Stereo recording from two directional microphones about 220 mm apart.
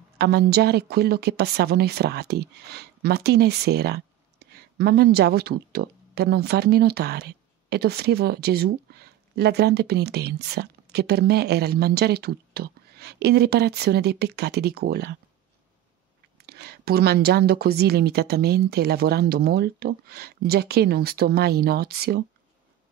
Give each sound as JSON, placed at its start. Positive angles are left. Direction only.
{"t": 0.2, "sound": "a woman's voice", "side_deg": -45}
{"t": 16.3, "sound": "a woman's voice", "side_deg": -45}